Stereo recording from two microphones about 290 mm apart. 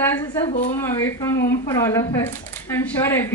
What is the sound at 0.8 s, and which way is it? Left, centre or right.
A woman's voice, centre.